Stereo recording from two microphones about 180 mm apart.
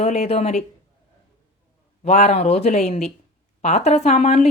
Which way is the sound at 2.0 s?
40° left (ahead or behind).